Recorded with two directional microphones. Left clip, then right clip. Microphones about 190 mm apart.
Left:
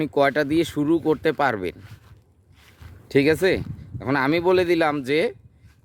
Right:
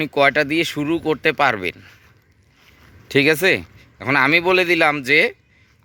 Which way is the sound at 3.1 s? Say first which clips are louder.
Right 3 dB; 15° left (ahead or behind).